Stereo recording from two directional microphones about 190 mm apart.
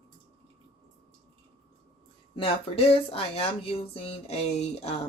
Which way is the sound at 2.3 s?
30° left (ahead or behind).